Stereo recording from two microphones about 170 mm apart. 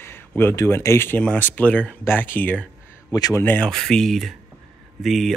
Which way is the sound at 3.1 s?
20° left (ahead or behind).